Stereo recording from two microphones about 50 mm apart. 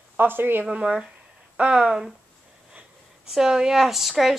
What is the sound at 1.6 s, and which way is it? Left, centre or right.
Speech, right.